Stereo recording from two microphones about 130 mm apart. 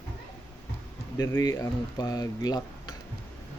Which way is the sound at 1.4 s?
25° left (ahead or behind).